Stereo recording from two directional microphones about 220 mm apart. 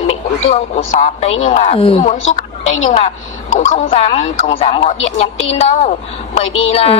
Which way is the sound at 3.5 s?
35° left (ahead or behind).